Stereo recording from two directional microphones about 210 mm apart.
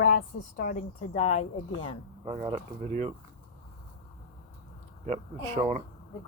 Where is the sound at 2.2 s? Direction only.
30° right (ahead or behind).